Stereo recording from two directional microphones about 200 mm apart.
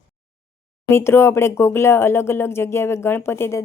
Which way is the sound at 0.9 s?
10° left (ahead or behind).